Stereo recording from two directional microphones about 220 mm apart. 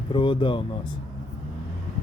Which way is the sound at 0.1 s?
25° left (ahead or behind).